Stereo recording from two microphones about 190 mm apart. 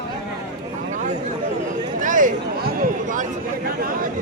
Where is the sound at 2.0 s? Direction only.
45° right (ahead or behind).